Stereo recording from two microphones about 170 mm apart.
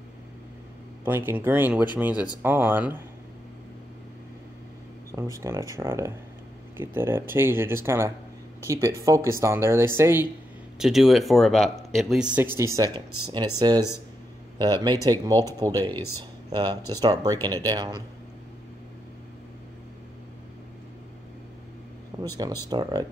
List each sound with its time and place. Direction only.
1.0 s speech: 10° right (ahead or behind)
5.1 s speech: 20° right (ahead or behind)
10.8 s speech: centre (ahead or behind); by 18.0 s 20° right (ahead or behind)
22.1 s a sound: 25° right (ahead or behind)
22.7 s speech: 25° right (ahead or behind)